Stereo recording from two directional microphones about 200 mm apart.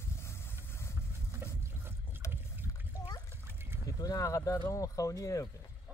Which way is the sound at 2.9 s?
20° left (ahead or behind).